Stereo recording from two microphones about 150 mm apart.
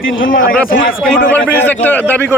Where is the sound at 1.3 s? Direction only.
10° left (ahead or behind).